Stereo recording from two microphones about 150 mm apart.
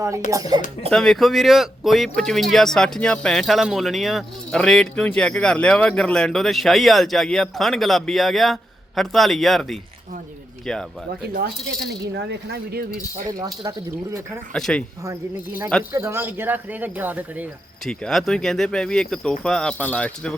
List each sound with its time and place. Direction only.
0.3 s speech: 25° right (ahead or behind)
0.9 s speech: 5° left (ahead or behind)
11.9 s speech: 90° right
13.4 s speech: 25° right (ahead or behind)
14.5 s speech: 5° left (ahead or behind)
15.0 s speech: 20° right (ahead or behind)
17.8 s speech: centre (ahead or behind)